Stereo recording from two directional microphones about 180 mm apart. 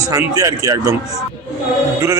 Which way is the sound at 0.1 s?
20° right (ahead or behind).